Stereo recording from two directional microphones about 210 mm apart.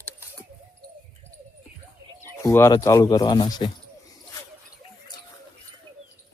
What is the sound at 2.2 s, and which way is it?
Speech, 10° left (ahead or behind).